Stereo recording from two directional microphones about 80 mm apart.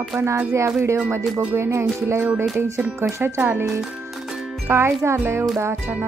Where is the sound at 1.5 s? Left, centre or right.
Right.